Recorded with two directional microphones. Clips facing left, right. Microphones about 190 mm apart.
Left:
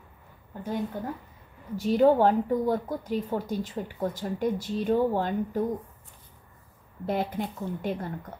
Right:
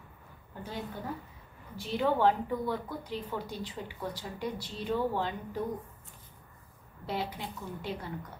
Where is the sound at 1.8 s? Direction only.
45° left (ahead or behind).